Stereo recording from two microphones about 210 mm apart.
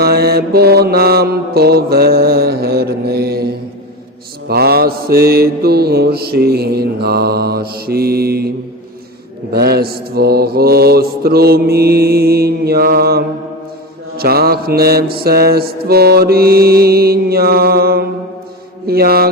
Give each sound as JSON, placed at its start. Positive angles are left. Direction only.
{"t": 0.0, "sound": "mantra", "side_deg": -50}